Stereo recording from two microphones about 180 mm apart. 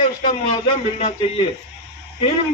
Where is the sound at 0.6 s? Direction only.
35° left (ahead or behind).